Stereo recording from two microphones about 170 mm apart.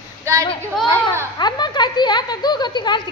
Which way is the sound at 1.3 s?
25° left (ahead or behind).